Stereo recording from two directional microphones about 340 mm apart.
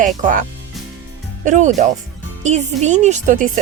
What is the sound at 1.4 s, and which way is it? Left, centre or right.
A woman's voice, right.